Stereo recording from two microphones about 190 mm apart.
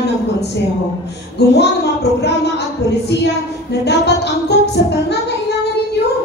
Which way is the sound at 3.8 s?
60° left (ahead or behind).